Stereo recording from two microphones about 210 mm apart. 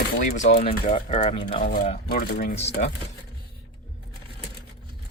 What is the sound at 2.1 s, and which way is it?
Speech, 45° left (ahead or behind).